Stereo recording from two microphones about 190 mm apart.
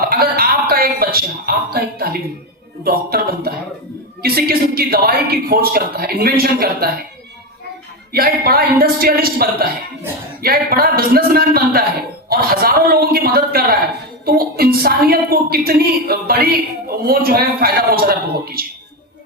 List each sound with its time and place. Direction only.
0.0 s a woman's voice: 50° right (ahead or behind)
8.1 s a woman's voice: 55° right (ahead or behind)